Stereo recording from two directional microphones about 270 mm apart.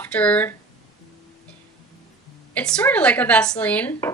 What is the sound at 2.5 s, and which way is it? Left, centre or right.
Speech, centre.